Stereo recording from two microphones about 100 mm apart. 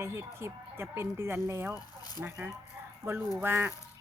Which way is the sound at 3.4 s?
20° right (ahead or behind).